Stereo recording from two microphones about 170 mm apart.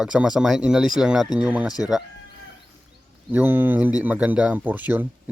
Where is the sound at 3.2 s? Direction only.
10° right (ahead or behind).